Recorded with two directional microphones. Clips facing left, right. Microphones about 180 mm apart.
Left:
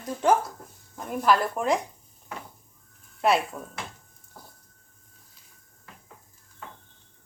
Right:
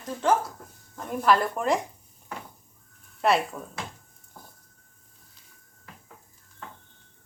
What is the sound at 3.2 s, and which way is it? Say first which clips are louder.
Speech: even; centre (ahead or behind).